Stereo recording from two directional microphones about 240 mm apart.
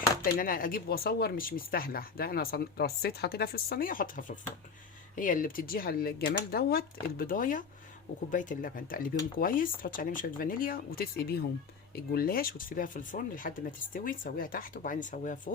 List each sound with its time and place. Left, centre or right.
0.3 s speech: left